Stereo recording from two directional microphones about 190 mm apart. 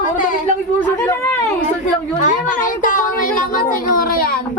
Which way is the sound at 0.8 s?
10° left (ahead or behind).